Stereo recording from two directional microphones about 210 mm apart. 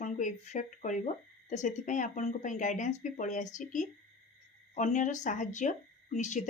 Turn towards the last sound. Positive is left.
turn(degrees=35)  # may be behind; listen again after turning